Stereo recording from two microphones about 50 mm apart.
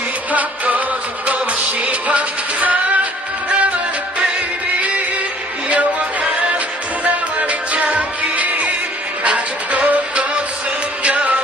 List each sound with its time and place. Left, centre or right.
0.3 s music: right
5.6 s music: right